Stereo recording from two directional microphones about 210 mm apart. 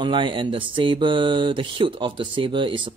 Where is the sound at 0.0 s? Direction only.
25° right (ahead or behind).